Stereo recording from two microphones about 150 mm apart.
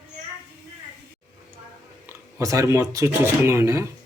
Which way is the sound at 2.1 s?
20° right (ahead or behind).